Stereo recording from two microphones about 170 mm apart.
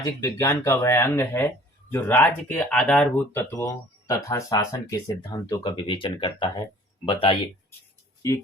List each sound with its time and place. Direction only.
0.0 s speech: 15° left (ahead or behind); by 7.3 s 30° left (ahead or behind)